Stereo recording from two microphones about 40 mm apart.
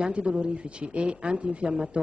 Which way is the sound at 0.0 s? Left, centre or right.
Right.